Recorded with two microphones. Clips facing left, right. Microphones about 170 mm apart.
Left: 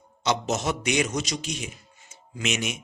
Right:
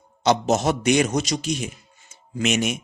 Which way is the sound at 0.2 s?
35° right (ahead or behind).